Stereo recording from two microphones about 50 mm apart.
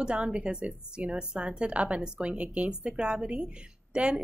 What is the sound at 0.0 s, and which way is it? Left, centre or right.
A woman's voice, right.